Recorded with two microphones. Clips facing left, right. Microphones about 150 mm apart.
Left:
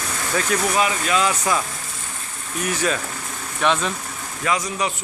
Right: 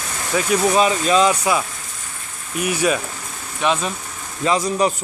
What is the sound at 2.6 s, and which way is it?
Speech, 10° right (ahead or behind).